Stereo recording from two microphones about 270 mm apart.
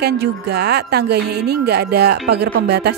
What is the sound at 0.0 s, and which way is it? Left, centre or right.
Speech, right.